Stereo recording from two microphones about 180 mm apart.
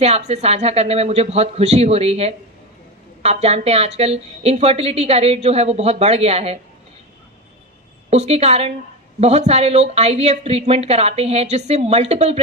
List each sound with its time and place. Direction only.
0.0 s a woman's voice: 35° right (ahead or behind)
8.1 s a woman's voice: 35° right (ahead or behind)